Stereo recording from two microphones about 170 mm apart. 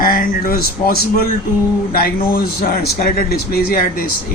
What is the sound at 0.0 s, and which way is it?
A man's voice, 55° left (ahead or behind).